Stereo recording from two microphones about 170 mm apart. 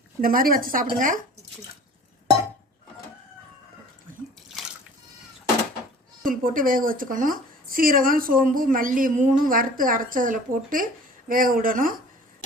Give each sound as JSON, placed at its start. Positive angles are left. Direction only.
{"t": 0.2, "sound": "speech", "side_deg": -55}
{"t": 6.2, "sound": "a woman's voice", "side_deg": -55}